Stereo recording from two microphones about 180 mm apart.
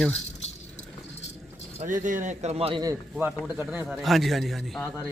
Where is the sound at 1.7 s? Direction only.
45° right (ahead or behind).